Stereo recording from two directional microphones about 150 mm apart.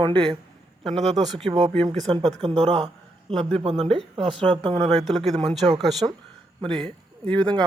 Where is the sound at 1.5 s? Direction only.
30° right (ahead or behind).